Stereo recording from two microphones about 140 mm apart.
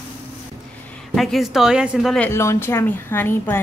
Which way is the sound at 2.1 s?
15° left (ahead or behind).